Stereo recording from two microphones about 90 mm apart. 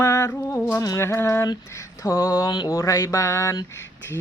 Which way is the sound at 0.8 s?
35° left (ahead or behind).